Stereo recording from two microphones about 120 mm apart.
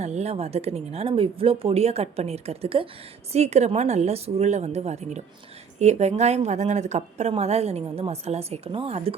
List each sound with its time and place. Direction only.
0.0 s a woman's voice: 65° right (ahead or behind)
3.3 s a woman's voice: 65° right (ahead or behind)